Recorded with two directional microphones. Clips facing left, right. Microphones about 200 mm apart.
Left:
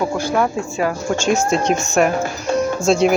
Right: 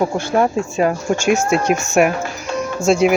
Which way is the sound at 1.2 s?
55° right (ahead or behind).